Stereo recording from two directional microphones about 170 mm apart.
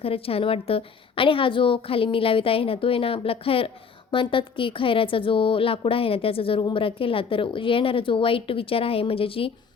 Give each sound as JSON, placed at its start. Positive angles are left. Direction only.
{"t": 0.0, "sound": "a woman's voice", "side_deg": 35}